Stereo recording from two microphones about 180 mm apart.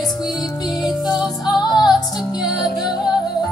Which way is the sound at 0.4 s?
20° left (ahead or behind).